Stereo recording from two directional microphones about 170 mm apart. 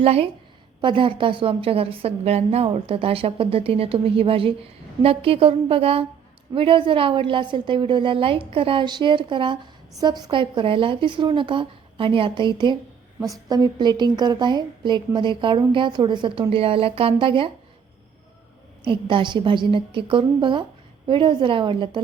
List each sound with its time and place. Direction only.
0.0 s a woman's voice: 35° right (ahead or behind)
18.9 s a woman's voice: 30° right (ahead or behind)